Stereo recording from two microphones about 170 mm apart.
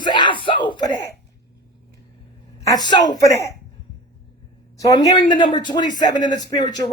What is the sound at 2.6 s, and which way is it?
Speech, 25° left (ahead or behind).